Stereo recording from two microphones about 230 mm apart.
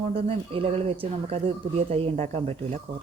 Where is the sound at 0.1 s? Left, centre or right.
Right.